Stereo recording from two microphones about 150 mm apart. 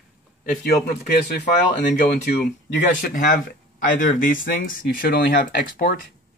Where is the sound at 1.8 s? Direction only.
60° left (ahead or behind).